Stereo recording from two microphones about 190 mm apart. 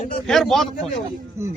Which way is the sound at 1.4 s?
15° right (ahead or behind).